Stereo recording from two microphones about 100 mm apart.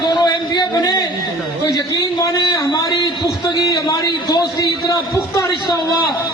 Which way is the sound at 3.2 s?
35° left (ahead or behind).